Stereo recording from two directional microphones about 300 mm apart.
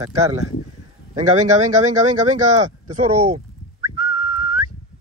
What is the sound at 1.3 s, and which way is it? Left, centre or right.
Speech, right.